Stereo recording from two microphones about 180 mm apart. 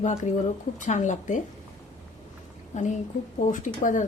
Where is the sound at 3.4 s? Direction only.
45° left (ahead or behind).